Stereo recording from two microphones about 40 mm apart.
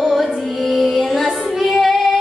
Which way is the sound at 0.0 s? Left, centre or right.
Centre.